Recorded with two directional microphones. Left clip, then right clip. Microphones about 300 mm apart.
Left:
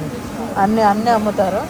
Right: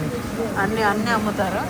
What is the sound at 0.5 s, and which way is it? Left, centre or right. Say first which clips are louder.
Speech: left 7 dB; centre.